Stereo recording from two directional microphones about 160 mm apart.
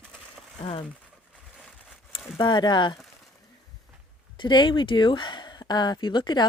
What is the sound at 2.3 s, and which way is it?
Speech, 25° left (ahead or behind).